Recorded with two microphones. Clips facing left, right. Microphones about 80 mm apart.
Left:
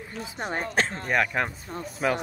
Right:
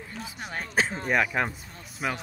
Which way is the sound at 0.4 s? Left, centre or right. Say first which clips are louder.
Left 6 dB; left.